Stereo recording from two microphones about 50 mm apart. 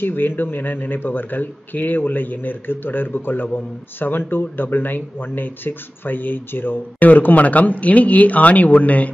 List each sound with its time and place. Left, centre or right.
0.0 s speech: left